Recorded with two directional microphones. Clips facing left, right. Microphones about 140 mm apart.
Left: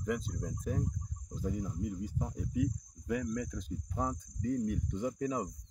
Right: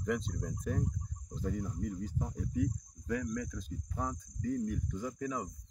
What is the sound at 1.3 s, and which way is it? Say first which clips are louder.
Cricket: even; 10° left (ahead or behind).